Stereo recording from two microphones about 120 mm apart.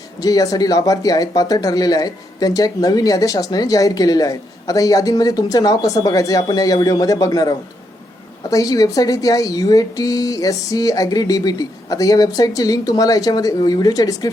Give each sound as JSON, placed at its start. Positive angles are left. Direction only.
{"t": 0.2, "sound": "speech", "side_deg": 30}